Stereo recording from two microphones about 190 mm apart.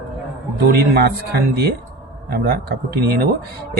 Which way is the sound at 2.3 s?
55° right (ahead or behind).